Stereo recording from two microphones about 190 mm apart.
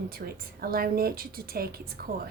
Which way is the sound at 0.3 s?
55° right (ahead or behind).